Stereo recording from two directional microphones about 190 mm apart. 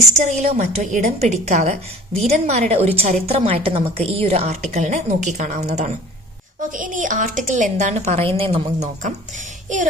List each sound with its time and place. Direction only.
0.2 s a woman's voice: 35° right (ahead or behind)